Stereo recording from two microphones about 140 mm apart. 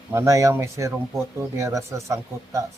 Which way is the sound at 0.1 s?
20° right (ahead or behind).